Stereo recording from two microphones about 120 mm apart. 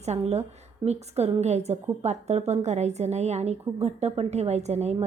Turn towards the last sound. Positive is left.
turn(degrees=-65)  # may be behind; listen again after turning